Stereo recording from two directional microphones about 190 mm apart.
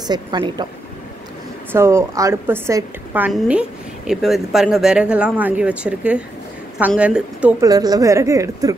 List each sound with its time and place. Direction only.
0.1 s speech: 20° right (ahead or behind)
1.7 s a woman's voice: 15° right (ahead or behind)
7.6 s a woman's voice: 20° right (ahead or behind)